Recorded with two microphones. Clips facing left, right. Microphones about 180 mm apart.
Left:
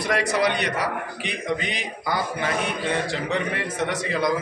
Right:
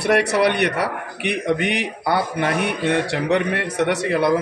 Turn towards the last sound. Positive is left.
turn(degrees=-65)  # may be behind; listen again after turning